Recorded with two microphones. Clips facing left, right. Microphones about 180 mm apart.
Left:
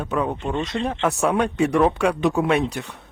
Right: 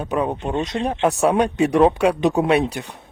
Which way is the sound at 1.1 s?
35° right (ahead or behind).